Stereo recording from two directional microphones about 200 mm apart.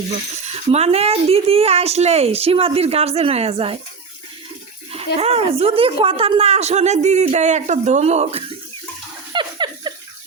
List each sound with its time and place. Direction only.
0.3 s a woman's voice: 35° right (ahead or behind)
4.9 s a woman's voice: 30° right (ahead or behind)
9.3 s a sound: 25° right (ahead or behind)